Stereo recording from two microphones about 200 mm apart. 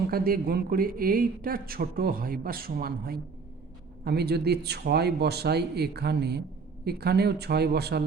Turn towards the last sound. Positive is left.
turn(degrees=-55)  # may be behind; listen again after turning